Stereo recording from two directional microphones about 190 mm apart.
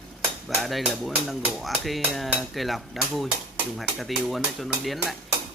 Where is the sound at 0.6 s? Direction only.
Centre (ahead or behind).